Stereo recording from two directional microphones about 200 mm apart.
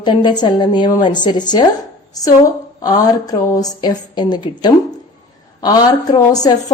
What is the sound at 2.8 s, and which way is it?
A woman's voice, 20° left (ahead or behind).